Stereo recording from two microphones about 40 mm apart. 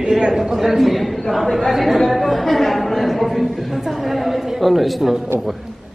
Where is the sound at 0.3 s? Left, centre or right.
Centre.